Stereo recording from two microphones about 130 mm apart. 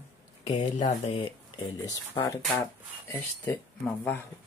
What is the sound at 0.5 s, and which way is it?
Speech, 65° left (ahead or behind).